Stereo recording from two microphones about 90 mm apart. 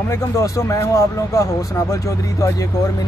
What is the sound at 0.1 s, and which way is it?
Speech, 35° left (ahead or behind).